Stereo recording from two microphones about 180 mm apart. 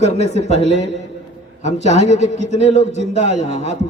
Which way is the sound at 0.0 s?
75° right (ahead or behind).